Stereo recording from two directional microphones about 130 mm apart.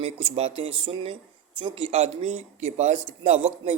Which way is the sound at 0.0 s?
45° right (ahead or behind).